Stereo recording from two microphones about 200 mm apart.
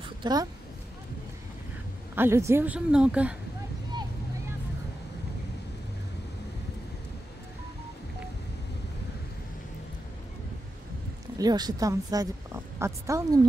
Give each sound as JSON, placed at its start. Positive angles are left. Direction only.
{"t": 0.2, "sound": "speech", "side_deg": -20}
{"t": 2.1, "sound": "a woman's voice", "side_deg": -15}
{"t": 11.3, "sound": "a woman's voice", "side_deg": -20}